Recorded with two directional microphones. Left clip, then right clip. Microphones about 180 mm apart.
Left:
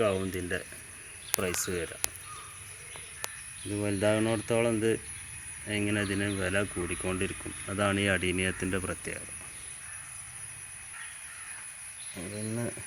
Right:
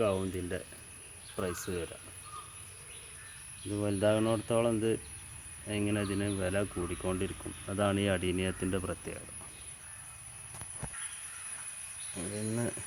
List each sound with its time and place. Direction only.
0.0 s speech: 10° left (ahead or behind)
3.8 s speech: 10° left (ahead or behind)
12.1 s speech: 5° left (ahead or behind)